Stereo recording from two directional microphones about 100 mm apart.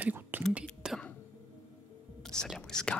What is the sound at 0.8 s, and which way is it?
Throat clearing, 5° right (ahead or behind).